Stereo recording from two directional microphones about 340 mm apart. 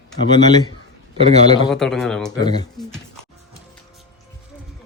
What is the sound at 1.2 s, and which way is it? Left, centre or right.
Speech, centre.